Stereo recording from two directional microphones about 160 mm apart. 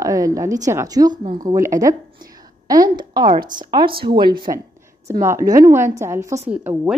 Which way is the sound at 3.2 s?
55° right (ahead or behind).